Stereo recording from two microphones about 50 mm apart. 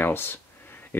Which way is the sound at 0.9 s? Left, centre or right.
Left.